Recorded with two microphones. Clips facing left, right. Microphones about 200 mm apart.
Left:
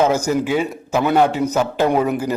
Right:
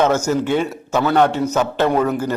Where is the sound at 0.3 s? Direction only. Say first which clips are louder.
Even; 5° left (ahead or behind).